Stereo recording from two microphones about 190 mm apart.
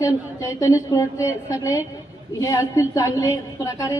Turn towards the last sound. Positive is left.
turn(degrees=15)  # may be behind; listen again after turning